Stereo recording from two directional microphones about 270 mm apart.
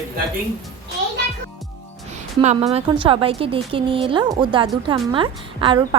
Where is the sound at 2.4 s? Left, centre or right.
Right.